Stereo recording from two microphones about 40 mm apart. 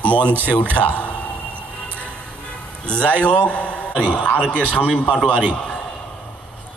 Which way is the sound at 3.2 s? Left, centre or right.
Left.